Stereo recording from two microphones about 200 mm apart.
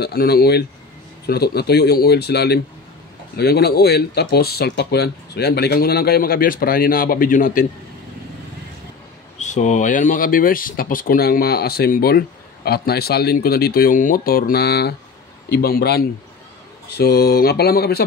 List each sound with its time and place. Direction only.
0.0 s speech: 50° left (ahead or behind)
9.4 s speech: 35° left (ahead or behind)